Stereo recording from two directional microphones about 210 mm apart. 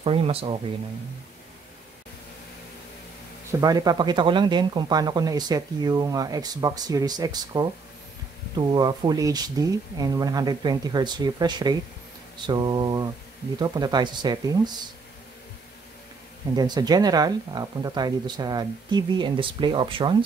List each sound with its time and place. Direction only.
0.0 s speech: 25° right (ahead or behind)
3.5 s speech: 15° right (ahead or behind)
16.5 s speech: 20° right (ahead or behind)